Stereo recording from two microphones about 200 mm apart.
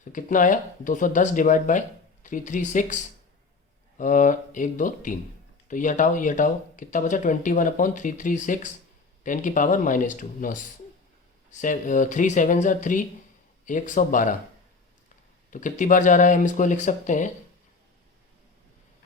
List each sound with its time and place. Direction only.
0.1 s speech: 40° left (ahead or behind)
15.4 s speech: 40° left (ahead or behind)